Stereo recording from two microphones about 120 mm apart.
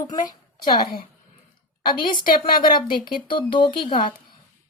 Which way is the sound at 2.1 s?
40° left (ahead or behind).